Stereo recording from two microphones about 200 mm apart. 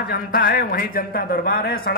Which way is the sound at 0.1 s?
45° left (ahead or behind).